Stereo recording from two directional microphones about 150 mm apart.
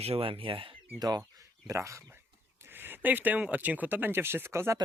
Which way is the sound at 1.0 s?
25° right (ahead or behind).